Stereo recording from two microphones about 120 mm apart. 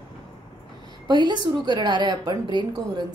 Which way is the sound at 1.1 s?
40° right (ahead or behind).